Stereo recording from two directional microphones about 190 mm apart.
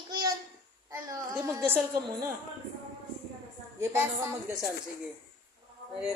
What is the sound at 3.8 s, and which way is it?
Speech, 10° right (ahead or behind).